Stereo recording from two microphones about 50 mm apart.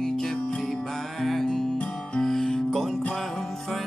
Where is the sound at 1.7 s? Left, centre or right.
Left.